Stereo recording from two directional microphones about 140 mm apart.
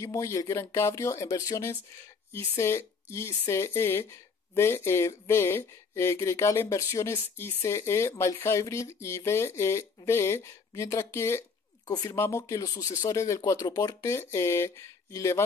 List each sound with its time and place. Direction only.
0.0 s speech: 20° left (ahead or behind)